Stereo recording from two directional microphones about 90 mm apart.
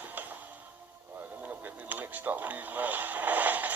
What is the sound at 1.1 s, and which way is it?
Speech, 20° right (ahead or behind).